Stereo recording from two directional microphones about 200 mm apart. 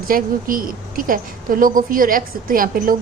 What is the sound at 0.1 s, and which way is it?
A woman's voice, 45° right (ahead or behind).